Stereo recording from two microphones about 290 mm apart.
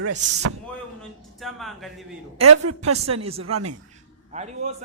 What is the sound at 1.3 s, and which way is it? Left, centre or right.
Speech, centre.